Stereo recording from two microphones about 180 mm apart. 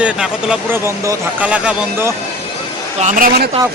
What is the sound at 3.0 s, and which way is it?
Speech, 45° right (ahead or behind).